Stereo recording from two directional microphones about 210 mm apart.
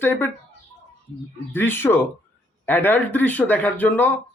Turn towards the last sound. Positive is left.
turn(degrees=10)  # may be behind; listen again after turning